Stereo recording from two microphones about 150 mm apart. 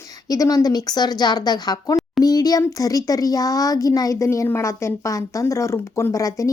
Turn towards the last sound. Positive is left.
turn(degrees=20)  # may be behind; listen again after turning